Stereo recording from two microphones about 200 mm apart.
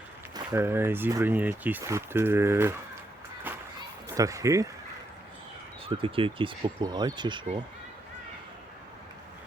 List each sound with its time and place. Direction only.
0.3 s speech: 10° right (ahead or behind)
3.5 s music: 10° right (ahead or behind)
4.1 s speech: 15° right (ahead or behind)
5.8 s speech: 25° right (ahead or behind)